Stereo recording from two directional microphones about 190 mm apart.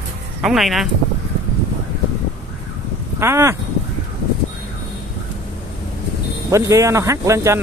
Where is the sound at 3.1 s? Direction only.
15° right (ahead or behind).